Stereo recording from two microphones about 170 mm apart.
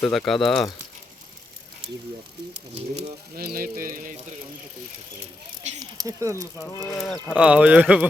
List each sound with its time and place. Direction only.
0.0 s speech: centre (ahead or behind)
3.3 s mantra: 60° right (ahead or behind)
5.8 s speech: 20° right (ahead or behind)
7.0 s speech: 10° left (ahead or behind)
7.3 s speech: 5° right (ahead or behind)